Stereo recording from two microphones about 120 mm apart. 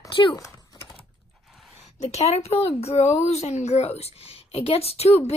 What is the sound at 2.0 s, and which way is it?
Speech, 65° left (ahead or behind).